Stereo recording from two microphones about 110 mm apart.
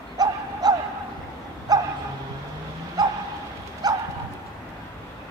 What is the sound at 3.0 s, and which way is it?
Dog, 35° right (ahead or behind).